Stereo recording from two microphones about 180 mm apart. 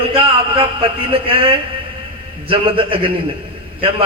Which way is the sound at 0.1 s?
30° right (ahead or behind).